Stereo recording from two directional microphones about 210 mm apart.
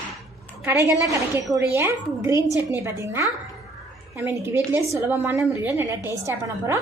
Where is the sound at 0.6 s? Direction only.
10° right (ahead or behind).